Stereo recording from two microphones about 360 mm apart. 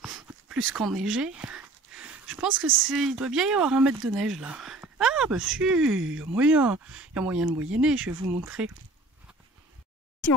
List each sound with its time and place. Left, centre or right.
0.0 s a sound: centre
2.6 s speech: right
2.9 s speech: centre